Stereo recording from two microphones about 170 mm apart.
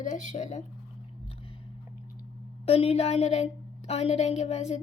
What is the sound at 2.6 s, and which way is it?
Speech, 35° left (ahead or behind).